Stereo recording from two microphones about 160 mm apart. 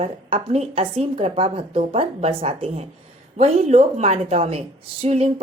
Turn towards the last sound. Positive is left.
turn(degrees=-40)  # may be behind; listen again after turning